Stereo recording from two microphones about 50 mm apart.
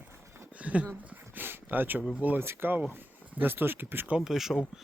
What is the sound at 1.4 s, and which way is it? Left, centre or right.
Speech, right.